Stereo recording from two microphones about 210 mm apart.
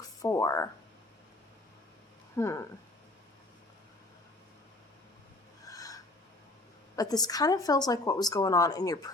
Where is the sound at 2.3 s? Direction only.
15° left (ahead or behind).